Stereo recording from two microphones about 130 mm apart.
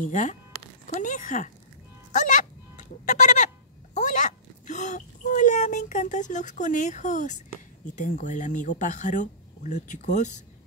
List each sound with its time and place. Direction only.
0.0 s speech: 75° left (ahead or behind)
2.1 s fowl: 70° left (ahead or behind)
7.9 s speech: 75° left (ahead or behind)